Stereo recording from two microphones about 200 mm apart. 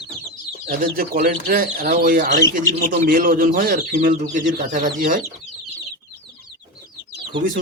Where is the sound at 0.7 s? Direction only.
45° right (ahead or behind).